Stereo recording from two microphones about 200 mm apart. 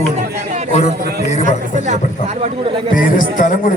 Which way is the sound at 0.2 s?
35° right (ahead or behind).